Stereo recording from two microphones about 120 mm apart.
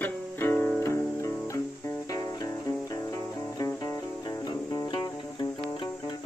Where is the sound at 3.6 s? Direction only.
25° left (ahead or behind).